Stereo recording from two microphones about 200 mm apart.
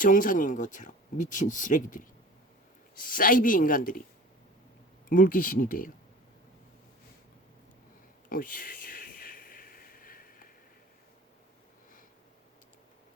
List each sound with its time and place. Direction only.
0.0 s speech: 40° left (ahead or behind)
5.0 s speech: 45° left (ahead or behind)
8.3 s a sound: 45° left (ahead or behind)